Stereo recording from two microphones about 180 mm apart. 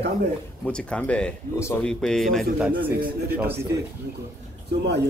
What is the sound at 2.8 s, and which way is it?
Speech, 55° right (ahead or behind).